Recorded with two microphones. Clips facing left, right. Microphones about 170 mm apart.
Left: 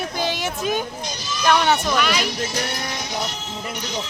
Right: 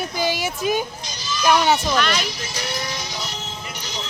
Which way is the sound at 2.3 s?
60° left (ahead or behind).